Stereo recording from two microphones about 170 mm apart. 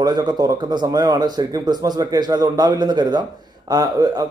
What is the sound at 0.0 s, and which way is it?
Speech, 25° right (ahead or behind).